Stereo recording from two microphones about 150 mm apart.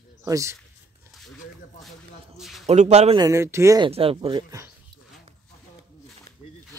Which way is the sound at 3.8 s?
40° right (ahead or behind).